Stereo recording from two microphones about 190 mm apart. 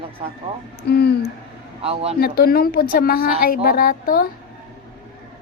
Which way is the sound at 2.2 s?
50° left (ahead or behind).